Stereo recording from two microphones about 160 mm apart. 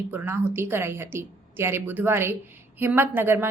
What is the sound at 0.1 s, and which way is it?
A woman's voice, 15° right (ahead or behind).